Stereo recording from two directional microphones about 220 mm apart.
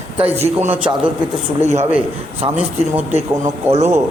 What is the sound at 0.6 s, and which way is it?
Speech, 10° right (ahead or behind).